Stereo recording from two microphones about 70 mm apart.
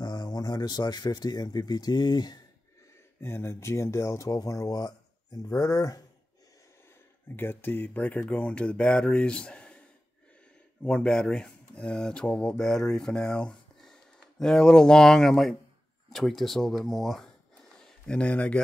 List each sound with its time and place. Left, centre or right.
0.0 s speech: left
3.2 s speech: left
4.3 s speech: left
7.3 s speech: left; by 17.3 s centre
18.0 s speech: centre